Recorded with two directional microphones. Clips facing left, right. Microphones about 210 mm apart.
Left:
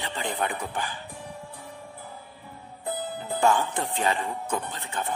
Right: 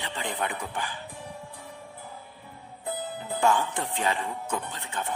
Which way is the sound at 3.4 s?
35° left (ahead or behind).